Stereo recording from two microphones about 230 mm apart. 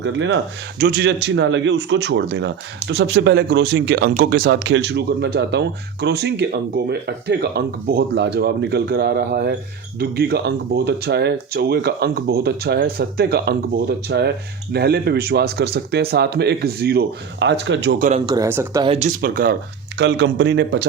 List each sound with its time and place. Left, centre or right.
0.0 s speech: right
0.8 s speech: right
18.3 s speech: centre
18.9 s speech: right
20.0 s speech: right